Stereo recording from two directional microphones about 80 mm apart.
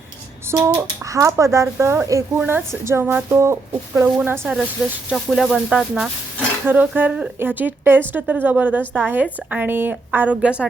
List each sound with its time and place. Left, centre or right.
0.5 s speech: right
2.3 s a woman's voice: right
3.7 s a woman's voice: right
4.8 s speech: centre
6.7 s a woman's voice: right